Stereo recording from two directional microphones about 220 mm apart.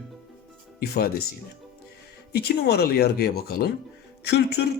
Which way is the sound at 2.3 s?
45° left (ahead or behind).